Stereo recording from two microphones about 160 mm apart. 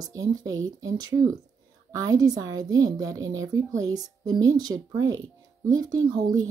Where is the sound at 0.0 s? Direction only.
20° right (ahead or behind).